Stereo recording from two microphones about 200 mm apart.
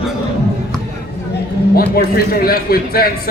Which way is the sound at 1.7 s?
50° left (ahead or behind).